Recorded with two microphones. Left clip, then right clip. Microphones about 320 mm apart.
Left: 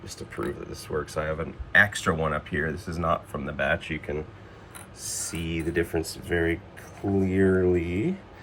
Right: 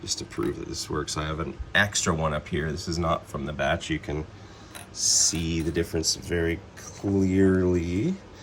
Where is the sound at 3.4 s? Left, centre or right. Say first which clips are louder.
Even; centre.